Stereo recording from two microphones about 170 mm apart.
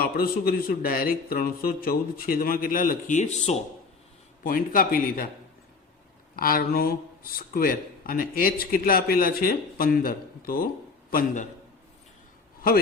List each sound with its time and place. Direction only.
0.0 s a man's voice: 60° left (ahead or behind); by 3.6 s 40° left (ahead or behind)
4.4 s a man's voice: 55° left (ahead or behind)
6.3 s a man's voice: 60° left (ahead or behind)